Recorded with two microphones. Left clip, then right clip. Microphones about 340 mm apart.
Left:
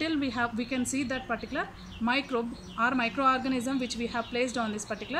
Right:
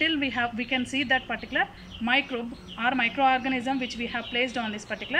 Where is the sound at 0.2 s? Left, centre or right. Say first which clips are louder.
Right 3 dB; centre.